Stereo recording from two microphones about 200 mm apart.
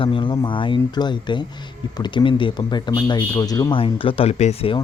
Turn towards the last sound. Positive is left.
turn(degrees=30)  # may be behind; listen again after turning